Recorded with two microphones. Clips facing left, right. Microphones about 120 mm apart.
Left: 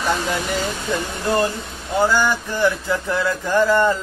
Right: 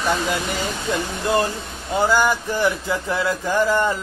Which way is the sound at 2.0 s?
20° right (ahead or behind).